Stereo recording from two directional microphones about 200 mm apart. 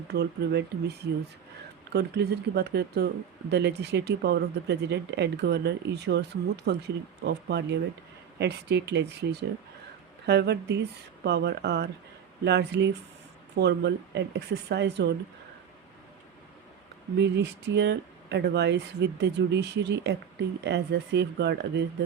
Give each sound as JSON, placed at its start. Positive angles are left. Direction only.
{"t": 0.1, "sound": "speech", "side_deg": -55}
{"t": 17.2, "sound": "speech", "side_deg": -60}